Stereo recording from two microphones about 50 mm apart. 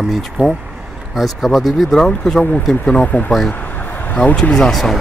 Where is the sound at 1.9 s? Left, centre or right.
Centre.